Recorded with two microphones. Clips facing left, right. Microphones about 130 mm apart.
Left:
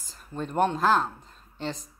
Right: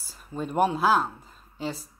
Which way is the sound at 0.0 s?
5° right (ahead or behind).